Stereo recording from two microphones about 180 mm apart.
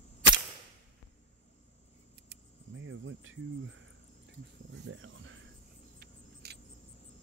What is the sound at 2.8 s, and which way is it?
Cricket, 90° right.